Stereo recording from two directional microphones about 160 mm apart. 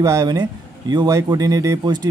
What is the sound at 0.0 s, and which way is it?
Speech, 20° right (ahead or behind).